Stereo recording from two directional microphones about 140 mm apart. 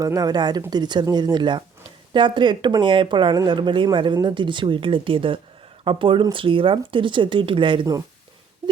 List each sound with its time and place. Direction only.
0.0 s speech: 25° right (ahead or behind)